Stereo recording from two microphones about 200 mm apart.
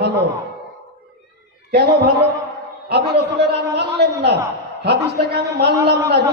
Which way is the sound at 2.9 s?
55° right (ahead or behind).